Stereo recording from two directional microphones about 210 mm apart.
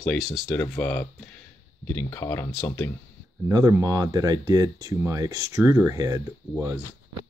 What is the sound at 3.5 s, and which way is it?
Speech, 15° right (ahead or behind).